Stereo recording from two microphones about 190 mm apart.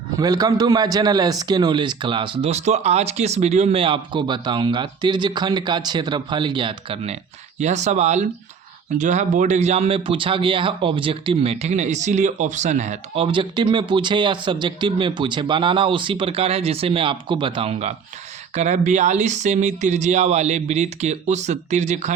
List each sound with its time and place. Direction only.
0.2 s speech: 20° right (ahead or behind); by 13.2 s 40° right (ahead or behind)
13.2 s speech: 25° right (ahead or behind)